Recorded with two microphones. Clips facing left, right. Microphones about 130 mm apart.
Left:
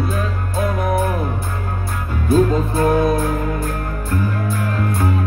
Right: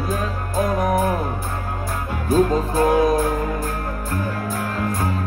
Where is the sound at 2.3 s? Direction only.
40° right (ahead or behind).